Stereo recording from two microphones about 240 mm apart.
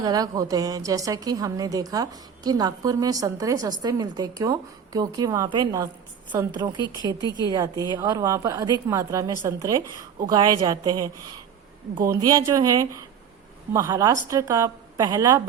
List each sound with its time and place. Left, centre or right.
0.0 s a woman's voice: centre